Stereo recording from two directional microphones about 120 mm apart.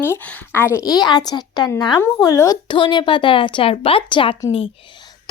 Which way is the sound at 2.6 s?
40° left (ahead or behind).